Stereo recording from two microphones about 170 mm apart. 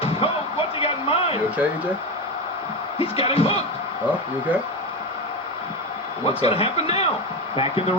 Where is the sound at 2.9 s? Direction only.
35° left (ahead or behind).